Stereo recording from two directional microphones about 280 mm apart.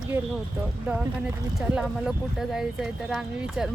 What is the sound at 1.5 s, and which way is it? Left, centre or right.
Speech, centre.